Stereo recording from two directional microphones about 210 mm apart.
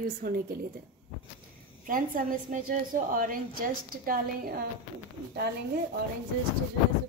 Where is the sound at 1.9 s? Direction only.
40° right (ahead or behind).